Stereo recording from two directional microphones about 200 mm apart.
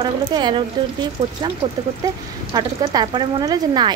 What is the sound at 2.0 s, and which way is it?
Speech, 20° right (ahead or behind).